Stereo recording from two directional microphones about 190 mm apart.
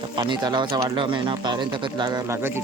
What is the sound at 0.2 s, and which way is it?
Speech, 20° right (ahead or behind).